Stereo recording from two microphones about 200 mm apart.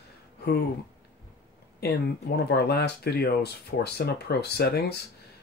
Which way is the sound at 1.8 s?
50° left (ahead or behind).